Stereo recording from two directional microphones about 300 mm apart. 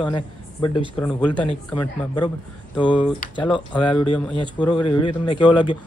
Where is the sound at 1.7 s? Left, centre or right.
Centre.